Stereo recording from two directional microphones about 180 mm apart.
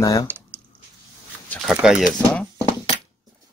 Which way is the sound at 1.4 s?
5° left (ahead or behind).